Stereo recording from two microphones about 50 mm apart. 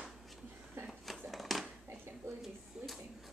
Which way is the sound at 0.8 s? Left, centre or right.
Right.